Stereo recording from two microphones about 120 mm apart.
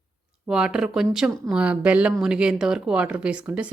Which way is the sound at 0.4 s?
5° right (ahead or behind).